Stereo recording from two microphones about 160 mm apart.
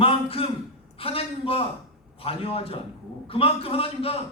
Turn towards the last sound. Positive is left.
turn(degrees=35)  # may be behind; listen again after turning